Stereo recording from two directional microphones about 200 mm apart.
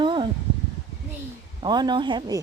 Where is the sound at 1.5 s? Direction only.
20° right (ahead or behind).